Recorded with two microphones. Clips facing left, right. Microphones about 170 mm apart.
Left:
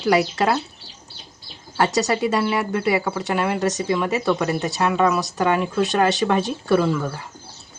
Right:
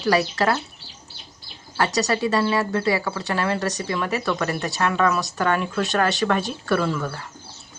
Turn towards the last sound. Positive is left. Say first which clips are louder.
# left 3 dB
turn(degrees=20)  # may be behind; listen again after turning